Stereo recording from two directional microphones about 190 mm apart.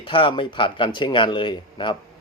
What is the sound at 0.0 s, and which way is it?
Speech, 25° left (ahead or behind).